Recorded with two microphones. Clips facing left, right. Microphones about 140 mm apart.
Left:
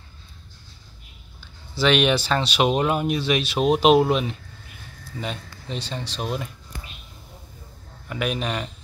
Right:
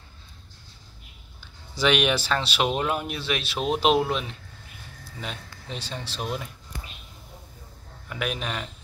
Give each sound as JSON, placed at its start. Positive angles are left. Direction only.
{"t": 1.8, "sound": "speech", "side_deg": -5}
{"t": 8.1, "sound": "speech", "side_deg": 0}